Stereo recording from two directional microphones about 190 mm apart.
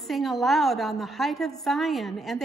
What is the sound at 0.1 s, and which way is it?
A woman's voice, centre (ahead or behind).